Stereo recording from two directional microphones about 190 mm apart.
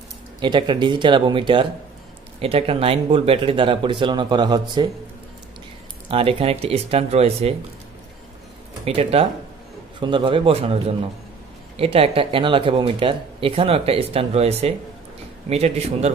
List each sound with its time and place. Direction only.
0.4 s speech: 25° right (ahead or behind)
6.0 s speech: 30° right (ahead or behind)
8.8 s speech: 30° right (ahead or behind)